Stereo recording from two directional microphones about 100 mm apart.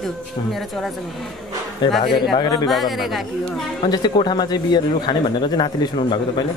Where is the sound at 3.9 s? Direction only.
45° left (ahead or behind).